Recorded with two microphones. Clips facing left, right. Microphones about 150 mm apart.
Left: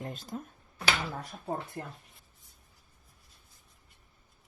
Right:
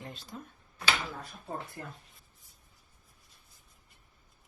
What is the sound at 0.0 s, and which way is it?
Speech, 45° left (ahead or behind).